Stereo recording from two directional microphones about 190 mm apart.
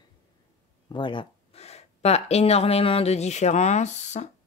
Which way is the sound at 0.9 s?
25° left (ahead or behind).